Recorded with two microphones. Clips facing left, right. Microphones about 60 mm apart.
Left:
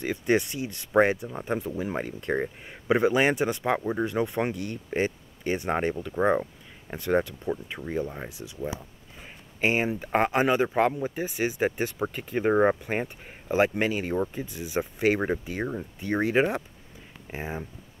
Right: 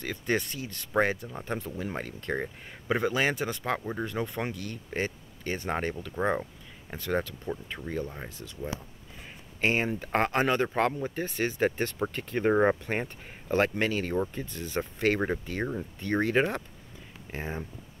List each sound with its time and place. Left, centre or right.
0.0 s speech: centre